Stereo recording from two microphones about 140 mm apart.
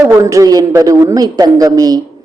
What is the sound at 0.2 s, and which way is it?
A man's voice, 20° right (ahead or behind).